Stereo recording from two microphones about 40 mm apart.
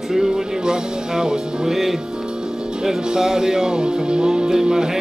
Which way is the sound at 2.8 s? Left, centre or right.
Centre.